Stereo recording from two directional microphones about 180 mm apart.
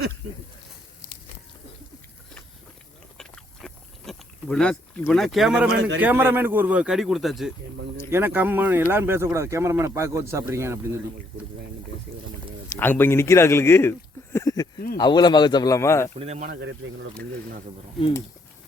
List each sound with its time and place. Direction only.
3.2 s a sound: centre (ahead or behind)
6.0 s speech: 10° right (ahead or behind)
8.1 s speech: 10° right (ahead or behind)
12.8 s speech: 10° left (ahead or behind)
14.3 s a sound: 20° left (ahead or behind)
14.9 s speech: 25° left (ahead or behind)
16.1 s speech: 35° right (ahead or behind)
16.5 s speech: 85° right